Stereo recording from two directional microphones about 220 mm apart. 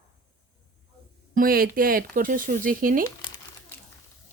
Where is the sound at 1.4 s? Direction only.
40° right (ahead or behind).